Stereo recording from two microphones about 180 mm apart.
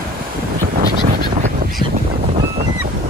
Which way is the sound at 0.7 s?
50° right (ahead or behind).